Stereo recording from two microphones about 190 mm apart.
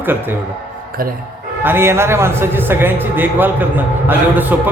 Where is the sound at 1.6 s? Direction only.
10° right (ahead or behind).